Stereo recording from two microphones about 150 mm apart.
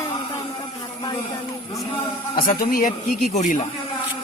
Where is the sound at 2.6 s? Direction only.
65° left (ahead or behind); by 3.6 s 50° left (ahead or behind).